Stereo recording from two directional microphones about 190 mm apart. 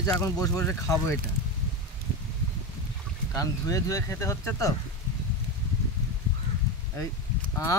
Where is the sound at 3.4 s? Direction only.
15° left (ahead or behind).